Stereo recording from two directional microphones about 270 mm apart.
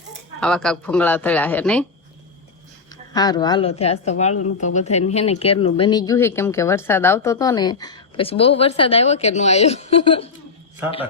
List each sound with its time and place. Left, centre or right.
0.3 s speech: centre
3.1 s a woman's voice: centre